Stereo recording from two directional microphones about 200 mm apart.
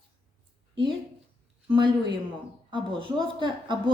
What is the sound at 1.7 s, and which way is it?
Speech, 25° right (ahead or behind).